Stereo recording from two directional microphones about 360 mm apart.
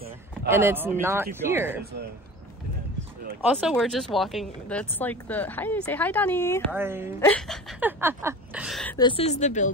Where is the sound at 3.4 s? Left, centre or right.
Centre.